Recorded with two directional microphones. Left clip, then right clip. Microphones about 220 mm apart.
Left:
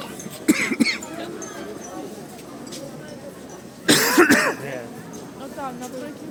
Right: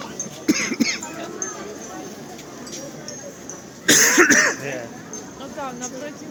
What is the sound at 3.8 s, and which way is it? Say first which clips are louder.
Cough: right 1 dB; 20° left (ahead or behind).